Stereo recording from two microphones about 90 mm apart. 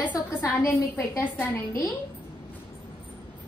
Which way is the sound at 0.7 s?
40° left (ahead or behind).